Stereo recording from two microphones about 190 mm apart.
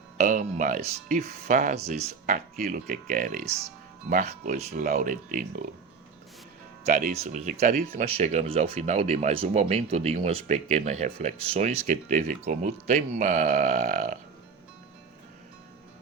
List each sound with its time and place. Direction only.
0.2 s speech: 40° right (ahead or behind)
6.8 s speech: 45° right (ahead or behind)